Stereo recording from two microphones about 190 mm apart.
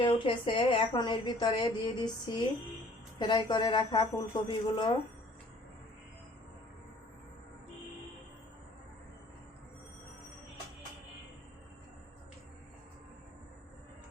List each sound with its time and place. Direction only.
0.0 s a woman's voice: 25° left (ahead or behind)